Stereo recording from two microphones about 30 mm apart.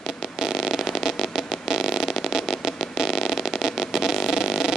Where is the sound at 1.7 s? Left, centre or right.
Centre.